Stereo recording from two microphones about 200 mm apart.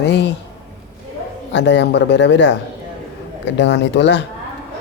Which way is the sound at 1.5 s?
60° left (ahead or behind).